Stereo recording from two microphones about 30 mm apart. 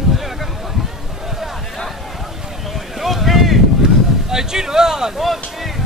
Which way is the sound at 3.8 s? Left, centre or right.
Centre.